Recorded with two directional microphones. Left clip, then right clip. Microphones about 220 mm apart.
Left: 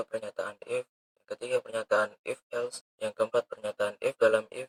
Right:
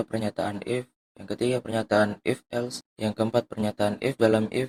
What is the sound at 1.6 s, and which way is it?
Speech, 20° right (ahead or behind).